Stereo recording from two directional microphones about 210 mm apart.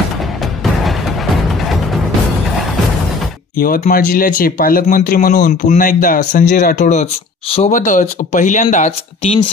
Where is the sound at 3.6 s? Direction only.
45° left (ahead or behind).